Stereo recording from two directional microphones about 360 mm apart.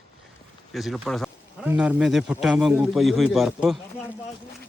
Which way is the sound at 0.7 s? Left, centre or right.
Centre.